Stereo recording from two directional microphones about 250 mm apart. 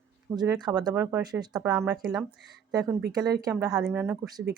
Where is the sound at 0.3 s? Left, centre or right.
Centre.